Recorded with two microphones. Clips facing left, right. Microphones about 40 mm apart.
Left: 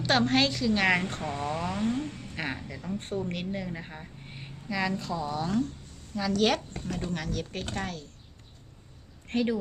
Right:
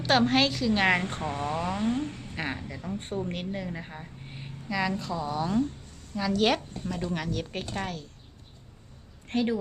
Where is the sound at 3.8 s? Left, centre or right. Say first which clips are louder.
Right 1 dB; centre.